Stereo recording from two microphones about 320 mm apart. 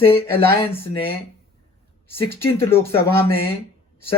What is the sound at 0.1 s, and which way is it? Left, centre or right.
Speech, centre.